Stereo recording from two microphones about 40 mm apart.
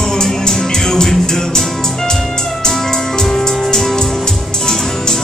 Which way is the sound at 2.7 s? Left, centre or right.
Centre.